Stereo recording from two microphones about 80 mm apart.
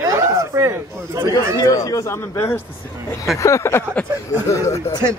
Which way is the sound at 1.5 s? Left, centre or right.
Left.